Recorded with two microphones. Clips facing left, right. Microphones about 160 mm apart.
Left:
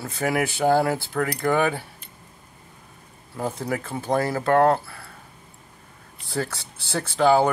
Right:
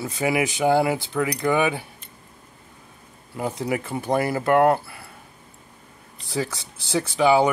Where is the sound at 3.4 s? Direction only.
15° right (ahead or behind).